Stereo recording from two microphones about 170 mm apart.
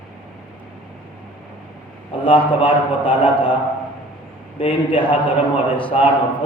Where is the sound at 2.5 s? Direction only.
30° left (ahead or behind).